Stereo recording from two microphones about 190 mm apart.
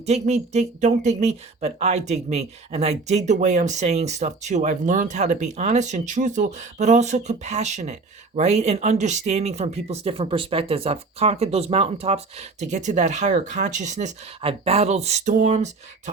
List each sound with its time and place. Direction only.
0.0 s speech: 35° right (ahead or behind)